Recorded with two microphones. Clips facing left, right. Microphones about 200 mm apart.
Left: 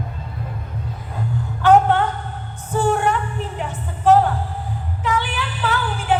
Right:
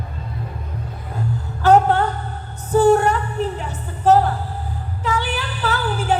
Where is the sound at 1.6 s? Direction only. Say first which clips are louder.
Even; 40° right (ahead or behind).